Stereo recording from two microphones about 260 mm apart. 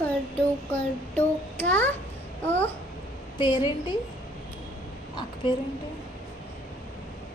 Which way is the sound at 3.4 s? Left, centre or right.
Centre.